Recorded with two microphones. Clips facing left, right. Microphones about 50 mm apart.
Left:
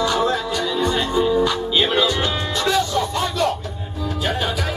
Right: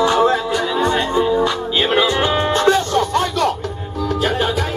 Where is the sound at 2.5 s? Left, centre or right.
Right.